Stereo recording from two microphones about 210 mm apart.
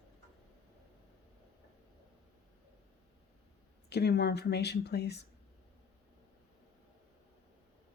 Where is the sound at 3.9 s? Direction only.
50° left (ahead or behind).